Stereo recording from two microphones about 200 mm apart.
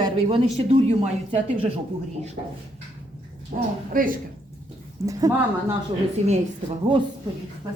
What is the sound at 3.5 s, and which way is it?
Speech, 40° right (ahead or behind).